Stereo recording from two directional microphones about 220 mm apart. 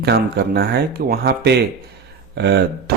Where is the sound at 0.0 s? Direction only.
50° right (ahead or behind).